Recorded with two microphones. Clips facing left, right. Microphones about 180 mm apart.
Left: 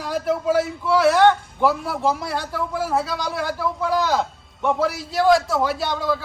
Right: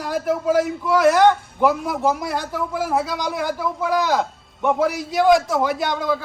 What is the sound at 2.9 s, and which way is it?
Speech, centre (ahead or behind).